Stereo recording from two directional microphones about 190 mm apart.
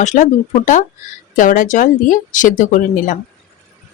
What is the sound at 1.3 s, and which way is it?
Speech, 45° left (ahead or behind).